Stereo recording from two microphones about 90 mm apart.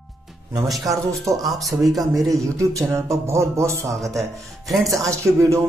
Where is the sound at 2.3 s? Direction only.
35° right (ahead or behind).